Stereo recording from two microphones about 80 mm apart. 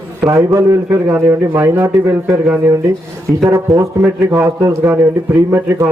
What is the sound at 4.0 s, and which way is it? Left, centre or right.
Speech, right.